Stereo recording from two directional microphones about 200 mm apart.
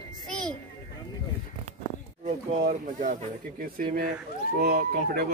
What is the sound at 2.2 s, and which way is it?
Speech, 35° right (ahead or behind).